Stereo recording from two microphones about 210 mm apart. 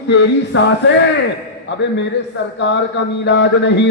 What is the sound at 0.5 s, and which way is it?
Speech, 60° left (ahead or behind).